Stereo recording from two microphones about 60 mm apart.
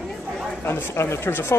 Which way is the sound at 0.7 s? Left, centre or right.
Left.